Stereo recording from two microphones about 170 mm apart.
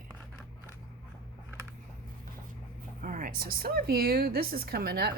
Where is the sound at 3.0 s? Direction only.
55° right (ahead or behind).